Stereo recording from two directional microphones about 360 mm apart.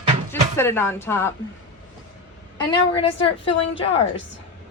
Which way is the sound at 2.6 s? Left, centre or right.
Centre.